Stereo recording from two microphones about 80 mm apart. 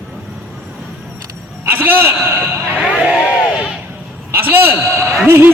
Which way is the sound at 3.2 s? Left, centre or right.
Centre.